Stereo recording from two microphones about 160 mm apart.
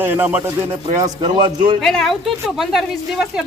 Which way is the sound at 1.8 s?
Centre (ahead or behind).